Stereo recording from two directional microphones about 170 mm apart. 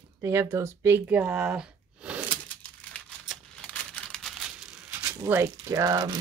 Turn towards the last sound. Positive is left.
turn(degrees=-20)  # may be behind; listen again after turning